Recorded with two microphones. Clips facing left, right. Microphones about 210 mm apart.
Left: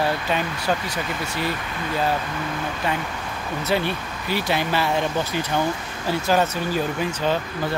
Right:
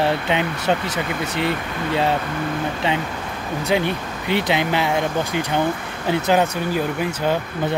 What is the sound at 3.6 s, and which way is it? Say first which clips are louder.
Speech: right 3 dB; 15° right (ahead or behind).